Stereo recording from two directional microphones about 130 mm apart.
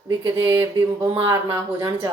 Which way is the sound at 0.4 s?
20° right (ahead or behind).